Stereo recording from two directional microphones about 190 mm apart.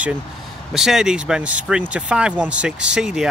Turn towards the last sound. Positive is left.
turn(degrees=-5)  # may be behind; listen again after turning